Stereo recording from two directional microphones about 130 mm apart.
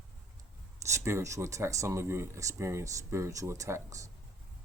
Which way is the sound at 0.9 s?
20° right (ahead or behind).